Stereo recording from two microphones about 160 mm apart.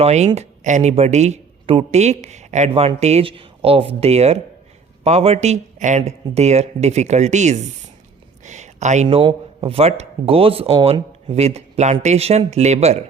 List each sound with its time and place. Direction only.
0.0 s speech: 45° right (ahead or behind)
8.4 s a sound: 45° right (ahead or behind)
9.0 s speech: 30° right (ahead or behind)